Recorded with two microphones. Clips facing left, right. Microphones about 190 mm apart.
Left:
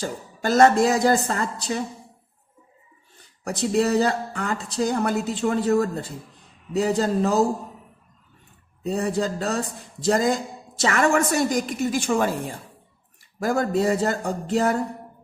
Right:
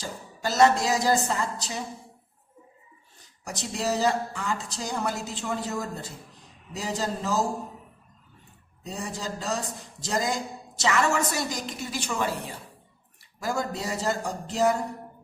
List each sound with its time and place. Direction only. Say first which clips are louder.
0.0 s speech: left 6 dB; 55° left (ahead or behind)
3.4 s speech: left 9 dB; 60° left (ahead or behind)
8.8 s a woman's voice: left 11 dB; 60° left (ahead or behind)